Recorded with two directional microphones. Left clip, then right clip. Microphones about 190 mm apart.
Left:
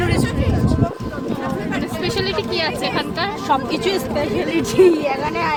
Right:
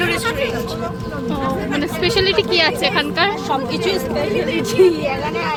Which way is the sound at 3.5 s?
50° left (ahead or behind).